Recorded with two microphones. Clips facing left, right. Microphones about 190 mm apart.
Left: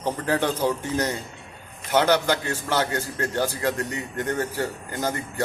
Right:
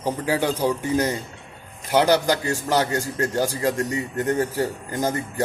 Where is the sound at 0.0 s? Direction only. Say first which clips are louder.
Right 1 dB; 10° right (ahead or behind).